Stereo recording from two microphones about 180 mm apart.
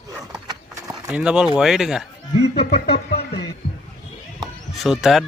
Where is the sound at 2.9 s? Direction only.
60° left (ahead or behind).